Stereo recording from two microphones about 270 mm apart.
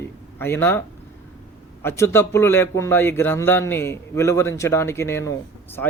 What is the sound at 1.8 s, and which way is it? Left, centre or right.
Speech, centre.